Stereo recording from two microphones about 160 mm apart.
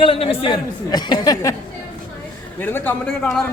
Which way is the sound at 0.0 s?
35° left (ahead or behind).